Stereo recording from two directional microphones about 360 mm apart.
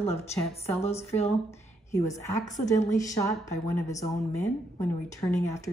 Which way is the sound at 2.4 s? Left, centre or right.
Centre.